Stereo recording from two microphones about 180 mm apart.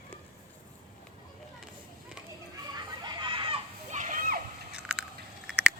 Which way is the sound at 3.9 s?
45° right (ahead or behind).